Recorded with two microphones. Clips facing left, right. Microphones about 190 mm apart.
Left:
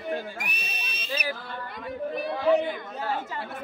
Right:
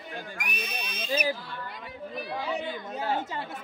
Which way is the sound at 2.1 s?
55° left (ahead or behind).